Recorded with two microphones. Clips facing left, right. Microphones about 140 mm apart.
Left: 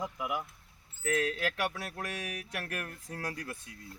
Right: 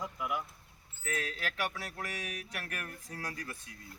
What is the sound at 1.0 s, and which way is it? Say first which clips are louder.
Speech: left 7 dB; 75° left (ahead or behind).